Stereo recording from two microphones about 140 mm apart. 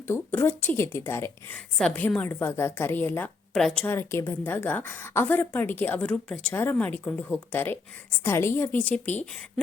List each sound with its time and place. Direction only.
0.1 s a woman's voice: 10° left (ahead or behind)
3.5 s speech: 5° left (ahead or behind)
3.8 s a woman's voice: 15° left (ahead or behind)